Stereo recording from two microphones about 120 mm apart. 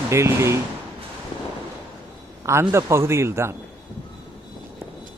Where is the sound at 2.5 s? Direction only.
25° right (ahead or behind).